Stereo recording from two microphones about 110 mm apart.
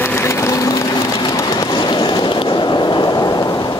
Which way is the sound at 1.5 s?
40° left (ahead or behind).